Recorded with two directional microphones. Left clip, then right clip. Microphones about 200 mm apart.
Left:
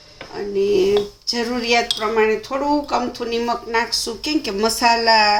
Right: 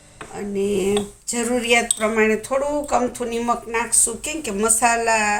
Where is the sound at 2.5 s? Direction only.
15° left (ahead or behind).